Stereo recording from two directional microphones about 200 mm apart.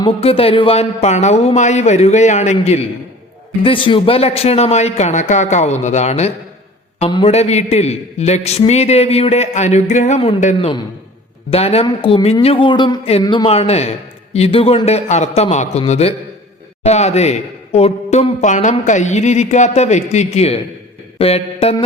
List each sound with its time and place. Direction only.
0.0 s a man's voice: 30° left (ahead or behind)